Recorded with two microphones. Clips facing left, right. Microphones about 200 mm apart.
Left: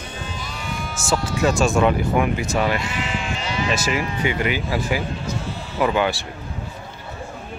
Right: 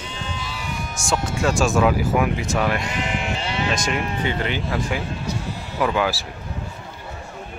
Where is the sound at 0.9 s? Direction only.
5° left (ahead or behind).